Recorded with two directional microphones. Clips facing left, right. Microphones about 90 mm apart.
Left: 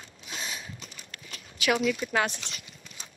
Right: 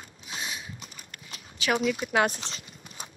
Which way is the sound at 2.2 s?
35° right (ahead or behind).